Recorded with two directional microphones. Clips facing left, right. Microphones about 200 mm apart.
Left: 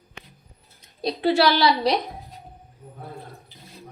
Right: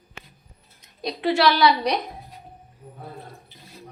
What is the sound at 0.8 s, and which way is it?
A woman's voice, 30° left (ahead or behind).